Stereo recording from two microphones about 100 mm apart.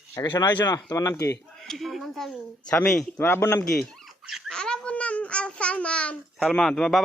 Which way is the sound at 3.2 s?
25° left (ahead or behind).